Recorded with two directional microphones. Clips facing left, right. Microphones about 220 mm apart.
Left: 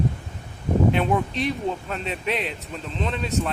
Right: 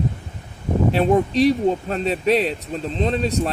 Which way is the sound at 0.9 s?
35° right (ahead or behind).